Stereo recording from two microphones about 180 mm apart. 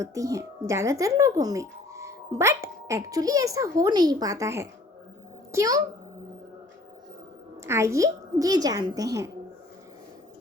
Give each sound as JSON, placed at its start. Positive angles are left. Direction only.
{"t": 0.0, "sound": "a child's voice", "side_deg": -20}
{"t": 7.6, "sound": "a woman's voice", "side_deg": -15}